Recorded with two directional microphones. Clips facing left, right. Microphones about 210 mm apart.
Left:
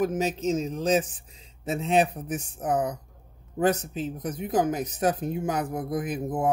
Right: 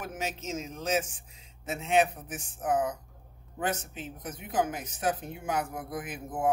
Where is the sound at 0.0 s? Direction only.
35° left (ahead or behind).